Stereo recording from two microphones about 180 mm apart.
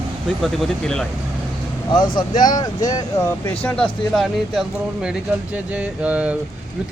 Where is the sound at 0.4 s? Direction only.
Centre (ahead or behind).